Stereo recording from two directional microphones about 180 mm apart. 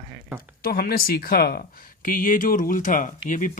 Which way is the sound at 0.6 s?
55° left (ahead or behind).